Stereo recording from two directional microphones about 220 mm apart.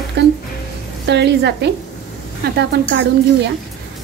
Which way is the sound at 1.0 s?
50° right (ahead or behind).